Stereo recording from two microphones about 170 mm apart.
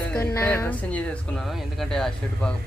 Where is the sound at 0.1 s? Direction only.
15° left (ahead or behind).